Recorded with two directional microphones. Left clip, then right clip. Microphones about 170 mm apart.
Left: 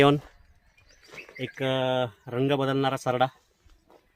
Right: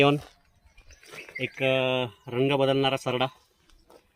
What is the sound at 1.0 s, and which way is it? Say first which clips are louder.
Wild animals: right 3 dB; 75° right (ahead or behind).